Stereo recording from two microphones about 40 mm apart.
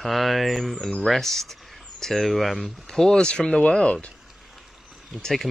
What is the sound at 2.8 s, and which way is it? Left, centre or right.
Speech, centre.